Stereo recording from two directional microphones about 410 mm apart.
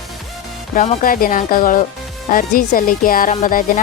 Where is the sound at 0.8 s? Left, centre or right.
Centre.